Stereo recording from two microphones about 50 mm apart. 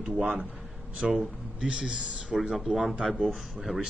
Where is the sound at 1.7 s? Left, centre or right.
Centre.